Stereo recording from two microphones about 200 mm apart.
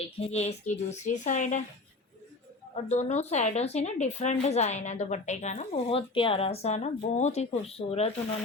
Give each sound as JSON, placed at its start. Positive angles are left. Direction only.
{"t": 0.2, "sound": "a woman's voice", "side_deg": 35}
{"t": 2.9, "sound": "a woman's voice", "side_deg": 35}